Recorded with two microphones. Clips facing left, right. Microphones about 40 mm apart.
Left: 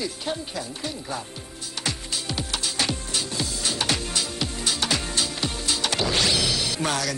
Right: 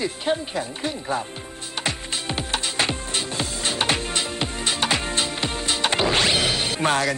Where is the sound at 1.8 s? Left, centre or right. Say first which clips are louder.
Right 2 dB; right.